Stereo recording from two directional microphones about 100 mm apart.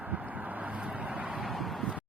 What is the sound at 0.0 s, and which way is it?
Vehicle, 15° right (ahead or behind).